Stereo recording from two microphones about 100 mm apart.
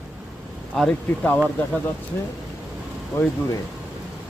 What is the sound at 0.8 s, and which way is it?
Speech, 10° left (ahead or behind).